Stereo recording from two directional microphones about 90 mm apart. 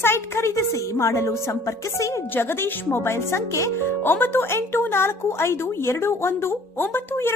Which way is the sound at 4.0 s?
20° left (ahead or behind).